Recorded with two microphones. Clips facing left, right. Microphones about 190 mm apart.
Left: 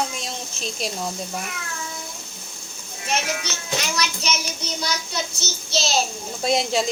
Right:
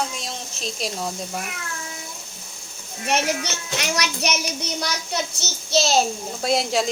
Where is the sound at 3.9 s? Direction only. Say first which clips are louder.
Right 2 dB; 70° right (ahead or behind).